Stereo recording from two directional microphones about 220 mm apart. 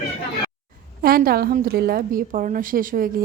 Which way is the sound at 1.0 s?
45° right (ahead or behind).